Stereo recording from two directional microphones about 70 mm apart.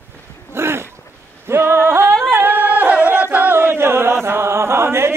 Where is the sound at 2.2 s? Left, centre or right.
Right.